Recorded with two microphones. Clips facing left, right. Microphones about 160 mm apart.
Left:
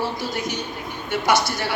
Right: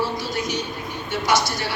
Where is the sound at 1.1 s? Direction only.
55° left (ahead or behind).